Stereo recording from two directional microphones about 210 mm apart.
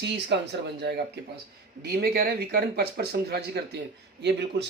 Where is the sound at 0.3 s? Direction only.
55° right (ahead or behind).